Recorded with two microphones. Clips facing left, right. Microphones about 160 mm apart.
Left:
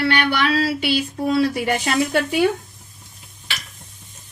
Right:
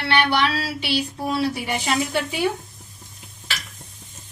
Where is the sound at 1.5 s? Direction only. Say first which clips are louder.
Left 3 dB; 55° left (ahead or behind).